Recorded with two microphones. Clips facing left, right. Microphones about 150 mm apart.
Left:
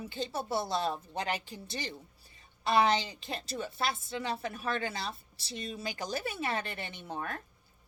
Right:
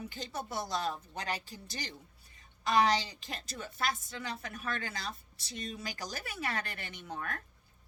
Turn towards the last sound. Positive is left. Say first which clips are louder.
# left 2 dB
turn(degrees=25)  # may be behind; listen again after turning